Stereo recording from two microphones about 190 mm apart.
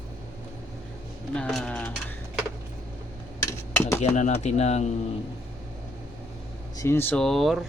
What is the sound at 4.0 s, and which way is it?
Speech, 40° left (ahead or behind).